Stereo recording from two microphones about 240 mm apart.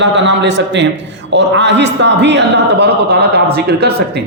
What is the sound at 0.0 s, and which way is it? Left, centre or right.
A man's voice, right.